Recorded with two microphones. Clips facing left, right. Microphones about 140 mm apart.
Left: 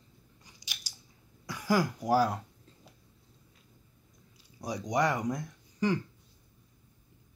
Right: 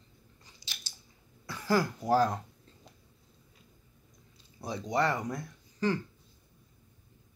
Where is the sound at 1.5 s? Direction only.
15° left (ahead or behind).